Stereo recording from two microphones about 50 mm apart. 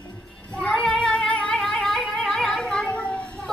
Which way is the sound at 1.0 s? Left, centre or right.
Left.